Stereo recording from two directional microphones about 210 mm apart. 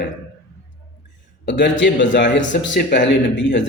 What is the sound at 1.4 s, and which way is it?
A man's voice, 55° left (ahead or behind).